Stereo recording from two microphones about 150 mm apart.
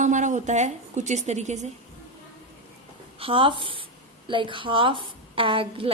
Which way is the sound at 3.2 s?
35° right (ahead or behind).